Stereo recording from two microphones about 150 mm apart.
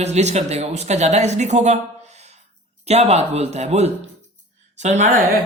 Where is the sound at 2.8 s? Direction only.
45° right (ahead or behind).